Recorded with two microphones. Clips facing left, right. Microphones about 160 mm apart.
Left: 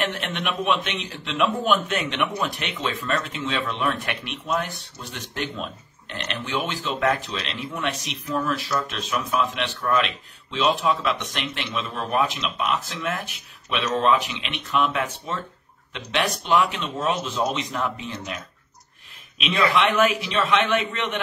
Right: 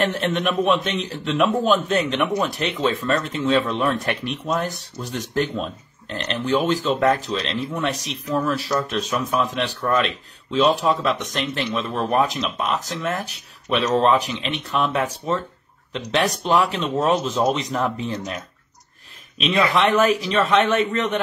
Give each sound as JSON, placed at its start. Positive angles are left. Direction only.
{"t": 0.0, "sound": "a man's voice", "side_deg": -40}
{"t": 19.3, "sound": "a man's voice", "side_deg": -40}